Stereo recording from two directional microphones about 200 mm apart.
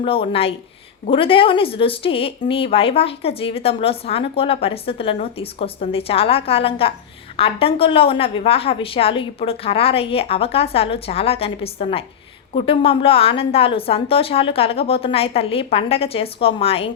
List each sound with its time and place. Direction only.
0.0 s speech: 25° left (ahead or behind)